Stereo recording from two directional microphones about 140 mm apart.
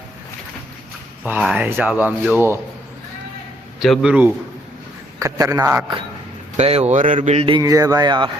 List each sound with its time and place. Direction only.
1.2 s speech: 5° right (ahead or behind)
3.8 s a man's voice: centre (ahead or behind)
5.2 s speech: 20° right (ahead or behind)
6.6 s a man's voice: 50° right (ahead or behind)
7.1 s mantra: 45° right (ahead or behind)
7.6 s speech: 25° right (ahead or behind)